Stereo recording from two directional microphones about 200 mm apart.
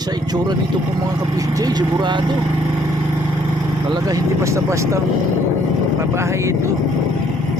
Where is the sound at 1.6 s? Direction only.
20° right (ahead or behind).